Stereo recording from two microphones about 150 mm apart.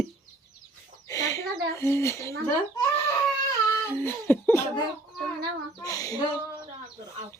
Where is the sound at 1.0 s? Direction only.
20° left (ahead or behind).